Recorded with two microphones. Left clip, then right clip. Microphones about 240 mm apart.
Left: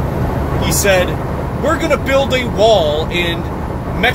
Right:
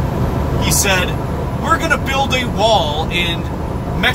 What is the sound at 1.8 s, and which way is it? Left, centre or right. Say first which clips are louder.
Speech: left 3 dB; right.